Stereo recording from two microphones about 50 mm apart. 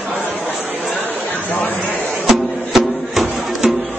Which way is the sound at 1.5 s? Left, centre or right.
Left.